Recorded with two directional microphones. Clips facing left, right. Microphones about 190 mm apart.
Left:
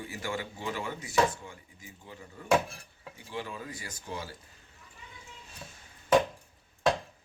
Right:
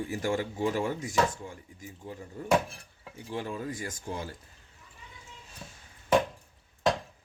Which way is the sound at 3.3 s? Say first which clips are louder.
Right 4 dB; 45° right (ahead or behind).